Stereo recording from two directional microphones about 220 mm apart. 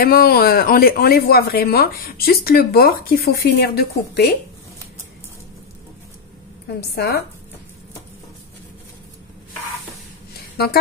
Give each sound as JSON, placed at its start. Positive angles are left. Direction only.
{"t": 0.0, "sound": "speech", "side_deg": 45}
{"t": 6.8, "sound": "speech", "side_deg": 45}